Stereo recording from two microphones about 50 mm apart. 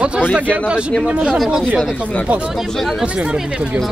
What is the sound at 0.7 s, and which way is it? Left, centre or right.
Speech, right.